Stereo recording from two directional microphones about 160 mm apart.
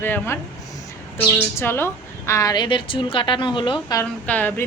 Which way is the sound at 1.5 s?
15° left (ahead or behind).